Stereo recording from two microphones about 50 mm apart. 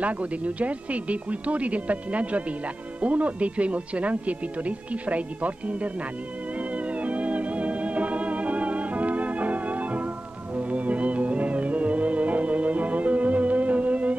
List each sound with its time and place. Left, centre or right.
0.0 s speech: right
6.9 s music: right